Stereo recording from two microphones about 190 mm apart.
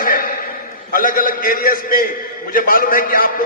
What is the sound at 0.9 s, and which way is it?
A man's voice, 45° left (ahead or behind).